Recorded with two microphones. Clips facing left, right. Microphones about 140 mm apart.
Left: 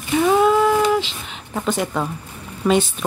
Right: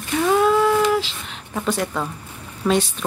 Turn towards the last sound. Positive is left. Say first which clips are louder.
# left 2 dB
turn(degrees=0)  # may be behind; listen again after turning